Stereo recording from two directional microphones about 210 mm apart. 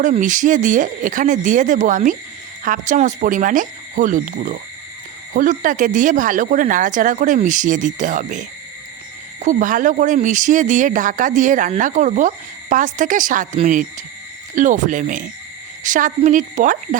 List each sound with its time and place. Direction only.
0.0 s speech: 35° right (ahead or behind)